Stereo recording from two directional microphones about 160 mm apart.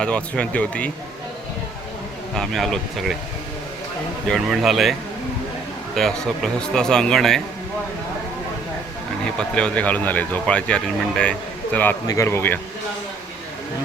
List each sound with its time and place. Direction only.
0.0 s speech: 5° left (ahead or behind)
2.3 s speech: 5° left (ahead or behind)
4.3 s speech: 5° right (ahead or behind)
9.2 s speech: 5° left (ahead or behind)